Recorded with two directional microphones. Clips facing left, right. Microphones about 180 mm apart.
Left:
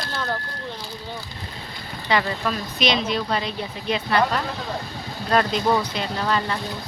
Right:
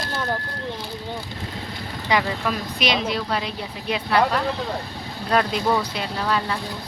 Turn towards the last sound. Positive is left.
turn(degrees=0)  # may be behind; listen again after turning